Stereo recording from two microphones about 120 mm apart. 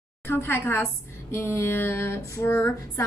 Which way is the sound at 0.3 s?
20° left (ahead or behind).